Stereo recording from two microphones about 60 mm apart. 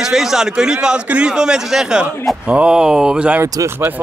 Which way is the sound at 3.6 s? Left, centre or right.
Right.